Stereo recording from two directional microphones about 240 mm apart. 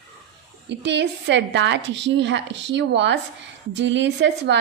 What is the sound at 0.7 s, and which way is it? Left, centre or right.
A woman's voice, right.